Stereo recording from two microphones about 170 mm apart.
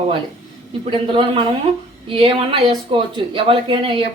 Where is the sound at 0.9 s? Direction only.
30° right (ahead or behind).